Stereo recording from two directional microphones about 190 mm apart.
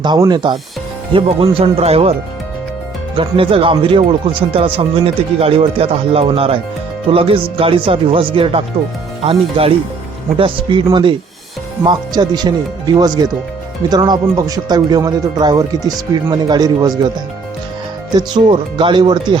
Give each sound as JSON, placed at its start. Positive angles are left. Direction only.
{"t": 0.0, "sound": "speech", "side_deg": -20}
{"t": 3.2, "sound": "speech", "side_deg": -30}
{"t": 18.1, "sound": "speech", "side_deg": -25}